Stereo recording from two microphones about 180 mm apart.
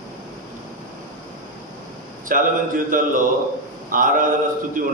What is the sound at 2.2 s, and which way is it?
Speech, 50° right (ahead or behind).